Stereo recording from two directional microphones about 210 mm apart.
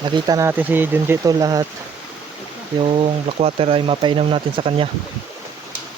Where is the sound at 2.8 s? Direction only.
25° right (ahead or behind).